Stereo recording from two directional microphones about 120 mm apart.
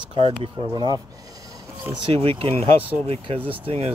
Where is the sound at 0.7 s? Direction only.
40° right (ahead or behind).